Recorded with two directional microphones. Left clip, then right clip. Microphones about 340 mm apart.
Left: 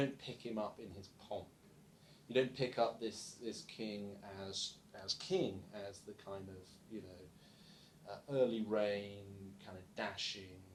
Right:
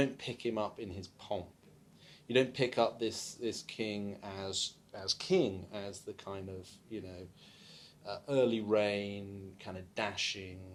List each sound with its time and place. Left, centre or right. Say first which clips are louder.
0.0 s speech: right 7 dB; right
8.0 s speech: right 5 dB; right